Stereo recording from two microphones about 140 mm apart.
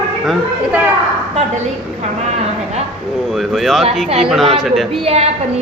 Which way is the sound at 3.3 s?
Centre (ahead or behind).